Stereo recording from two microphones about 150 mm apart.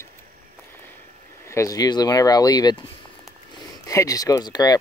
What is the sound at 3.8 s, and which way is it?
Speech, 25° left (ahead or behind).